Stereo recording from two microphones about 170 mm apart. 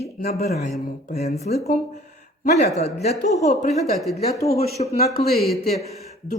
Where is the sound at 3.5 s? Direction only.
40° left (ahead or behind).